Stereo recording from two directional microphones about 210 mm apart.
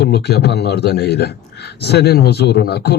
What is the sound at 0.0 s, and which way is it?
A man's voice, 50° left (ahead or behind).